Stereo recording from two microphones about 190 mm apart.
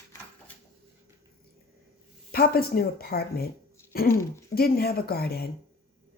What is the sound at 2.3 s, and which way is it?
Speech, 55° left (ahead or behind).